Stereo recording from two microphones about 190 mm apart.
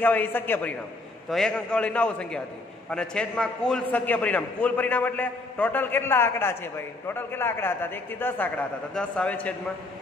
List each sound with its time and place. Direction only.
0.0 s a man's voice: 10° left (ahead or behind)